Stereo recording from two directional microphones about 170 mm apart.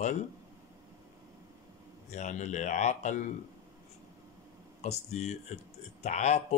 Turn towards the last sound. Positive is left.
turn(degrees=40)  # may be behind; listen again after turning